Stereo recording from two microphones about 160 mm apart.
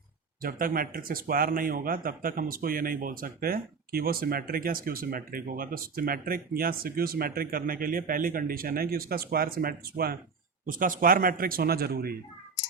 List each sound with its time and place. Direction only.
0.4 s a man's voice: 60° right (ahead or behind)
10.7 s a man's voice: 60° right (ahead or behind); by 12.1 s 75° right (ahead or behind)